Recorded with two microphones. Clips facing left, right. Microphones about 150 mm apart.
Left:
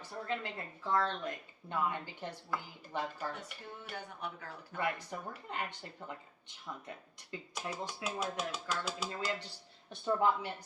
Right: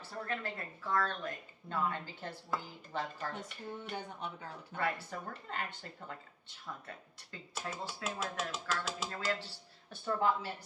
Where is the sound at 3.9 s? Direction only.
25° right (ahead or behind).